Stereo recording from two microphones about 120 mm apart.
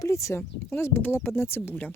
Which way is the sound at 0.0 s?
25° left (ahead or behind).